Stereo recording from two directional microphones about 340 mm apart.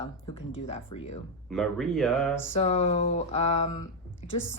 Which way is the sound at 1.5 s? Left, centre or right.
Centre.